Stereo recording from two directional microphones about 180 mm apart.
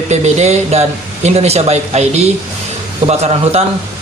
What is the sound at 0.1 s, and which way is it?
A man's voice, 40° right (ahead or behind).